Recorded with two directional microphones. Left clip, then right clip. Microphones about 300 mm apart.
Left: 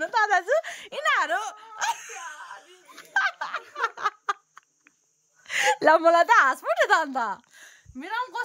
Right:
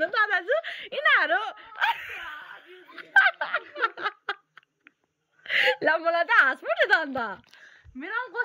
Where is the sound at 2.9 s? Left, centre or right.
Centre.